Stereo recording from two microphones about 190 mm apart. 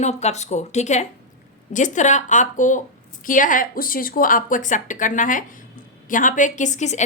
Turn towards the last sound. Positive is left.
turn(degrees=40)  # may be behind; listen again after turning